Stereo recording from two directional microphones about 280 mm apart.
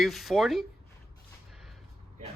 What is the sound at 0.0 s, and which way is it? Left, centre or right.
Speech, centre.